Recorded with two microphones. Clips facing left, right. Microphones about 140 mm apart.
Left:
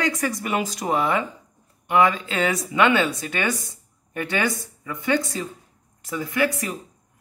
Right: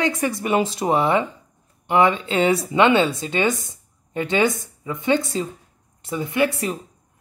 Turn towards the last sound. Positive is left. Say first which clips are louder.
# right 2 dB
turn(degrees=-25)  # may be behind; listen again after turning